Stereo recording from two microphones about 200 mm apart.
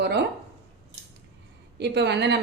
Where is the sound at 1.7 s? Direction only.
60° right (ahead or behind).